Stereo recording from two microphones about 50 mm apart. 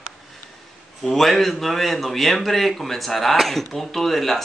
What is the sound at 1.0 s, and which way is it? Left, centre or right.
A man's voice, centre.